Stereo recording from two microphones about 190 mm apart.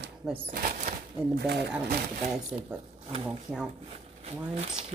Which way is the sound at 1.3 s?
60° right (ahead or behind).